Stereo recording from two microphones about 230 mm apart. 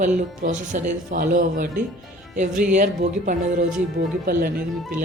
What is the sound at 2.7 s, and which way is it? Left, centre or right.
Speech, right.